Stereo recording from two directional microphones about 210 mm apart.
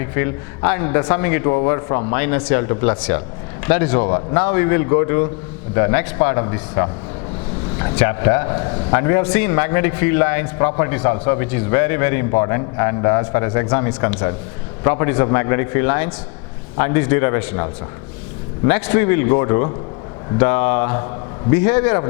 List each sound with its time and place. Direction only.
0.0 s a man's voice: 15° left (ahead or behind)